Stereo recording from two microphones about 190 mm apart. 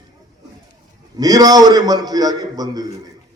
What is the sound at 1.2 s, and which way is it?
A man's voice, 20° right (ahead or behind).